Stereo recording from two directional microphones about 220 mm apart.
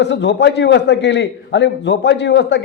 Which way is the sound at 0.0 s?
50° left (ahead or behind).